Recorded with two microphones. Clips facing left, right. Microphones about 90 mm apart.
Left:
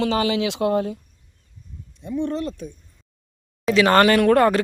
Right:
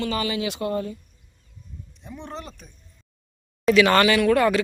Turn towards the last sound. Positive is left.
turn(degrees=45)  # may be behind; listen again after turning